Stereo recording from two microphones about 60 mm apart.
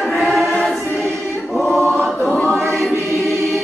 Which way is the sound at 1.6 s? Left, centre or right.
Centre.